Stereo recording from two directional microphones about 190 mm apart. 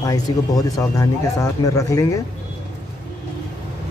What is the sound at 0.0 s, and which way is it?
Speech, 20° left (ahead or behind).